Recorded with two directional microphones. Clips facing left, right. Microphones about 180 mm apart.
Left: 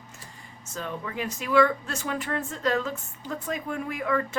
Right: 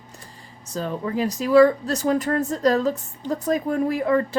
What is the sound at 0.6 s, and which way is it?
Speech, 35° right (ahead or behind).